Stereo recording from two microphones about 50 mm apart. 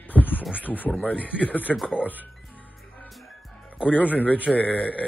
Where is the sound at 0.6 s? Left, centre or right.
Left.